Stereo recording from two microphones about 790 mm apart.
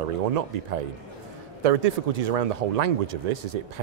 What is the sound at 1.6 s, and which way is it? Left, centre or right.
Speech, right.